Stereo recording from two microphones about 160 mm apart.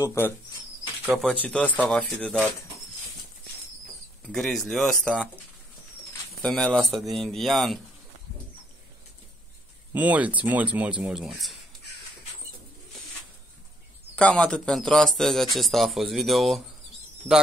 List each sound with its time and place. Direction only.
0.0 s speech: 15° left (ahead or behind)
1.1 s speech: centre (ahead or behind)
4.2 s speech: centre (ahead or behind)
6.4 s speech: 5° left (ahead or behind)
9.9 s speech: 10° right (ahead or behind)
14.1 s speech: 5° left (ahead or behind)